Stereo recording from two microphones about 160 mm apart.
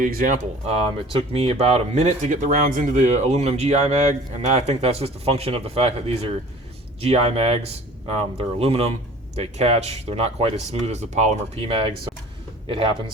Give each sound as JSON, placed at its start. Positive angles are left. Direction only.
{"t": 0.0, "sound": "speech", "side_deg": -60}
{"t": 0.7, "sound": "speech", "side_deg": -35}